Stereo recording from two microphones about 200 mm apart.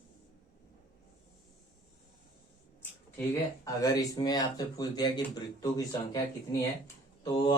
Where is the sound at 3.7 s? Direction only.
20° left (ahead or behind).